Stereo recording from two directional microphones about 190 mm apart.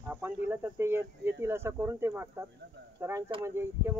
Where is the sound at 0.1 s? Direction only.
10° right (ahead or behind).